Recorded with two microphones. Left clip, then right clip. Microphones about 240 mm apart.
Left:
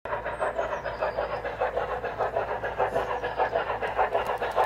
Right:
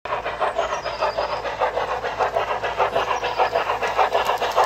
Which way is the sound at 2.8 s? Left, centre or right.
Centre.